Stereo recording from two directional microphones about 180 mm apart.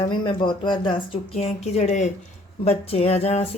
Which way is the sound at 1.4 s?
35° left (ahead or behind).